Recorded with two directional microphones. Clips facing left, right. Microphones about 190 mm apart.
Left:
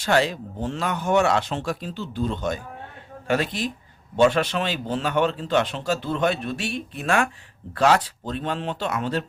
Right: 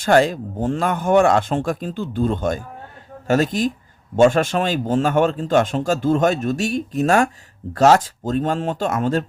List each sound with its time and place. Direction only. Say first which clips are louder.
0.0 s a man's voice: right 6 dB; 50° right (ahead or behind)